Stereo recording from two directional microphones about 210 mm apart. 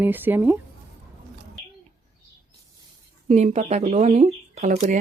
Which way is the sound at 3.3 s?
30° right (ahead or behind).